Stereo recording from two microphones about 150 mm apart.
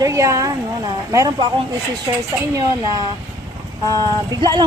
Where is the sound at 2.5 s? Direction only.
25° right (ahead or behind).